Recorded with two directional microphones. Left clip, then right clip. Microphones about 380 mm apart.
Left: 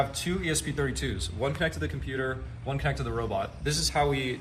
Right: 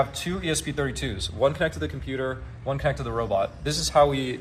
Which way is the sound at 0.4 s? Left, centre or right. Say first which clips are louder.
Right 4 dB; centre.